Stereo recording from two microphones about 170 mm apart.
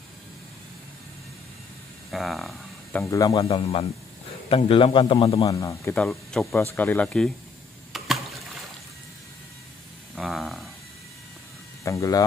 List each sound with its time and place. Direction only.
2.0 s a sound: centre (ahead or behind)
3.0 s speech: 20° left (ahead or behind)
3.4 s a man's voice: 35° left (ahead or behind)
5.5 s speech: 20° left (ahead or behind)
5.9 s speech: 5° left (ahead or behind)
6.5 s speech: 15° left (ahead or behind)
7.9 s a sound: centre (ahead or behind)
10.1 s a sound: centre (ahead or behind)
11.8 s speech: 20° left (ahead or behind)